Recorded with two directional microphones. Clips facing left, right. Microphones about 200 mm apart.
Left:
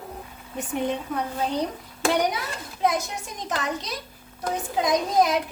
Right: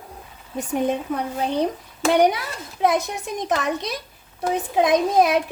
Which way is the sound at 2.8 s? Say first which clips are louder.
Right 4 dB; 60° right (ahead or behind).